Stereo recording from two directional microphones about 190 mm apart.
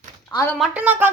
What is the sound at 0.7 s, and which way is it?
Speech, 10° right (ahead or behind).